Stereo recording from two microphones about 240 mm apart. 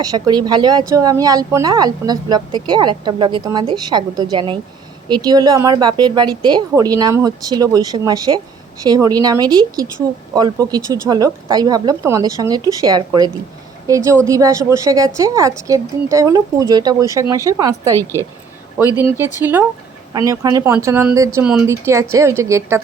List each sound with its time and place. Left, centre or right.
0.0 s speech: centre
17.9 s speech: centre
19.1 s speech: centre